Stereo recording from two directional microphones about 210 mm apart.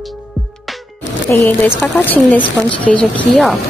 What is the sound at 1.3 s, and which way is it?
A woman's voice, 10° left (ahead or behind).